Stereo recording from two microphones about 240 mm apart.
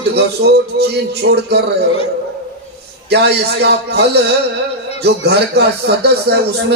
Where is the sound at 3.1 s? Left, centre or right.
Right.